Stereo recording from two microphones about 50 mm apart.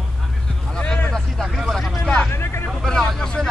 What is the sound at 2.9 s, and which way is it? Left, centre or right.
Vehicle, centre.